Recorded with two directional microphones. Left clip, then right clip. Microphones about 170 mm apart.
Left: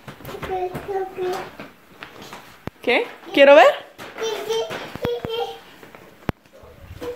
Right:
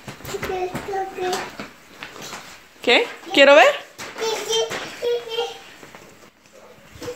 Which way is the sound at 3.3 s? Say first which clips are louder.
Left 1 dB; 15° left (ahead or behind).